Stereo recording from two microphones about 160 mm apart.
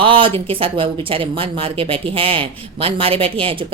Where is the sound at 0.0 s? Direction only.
35° right (ahead or behind).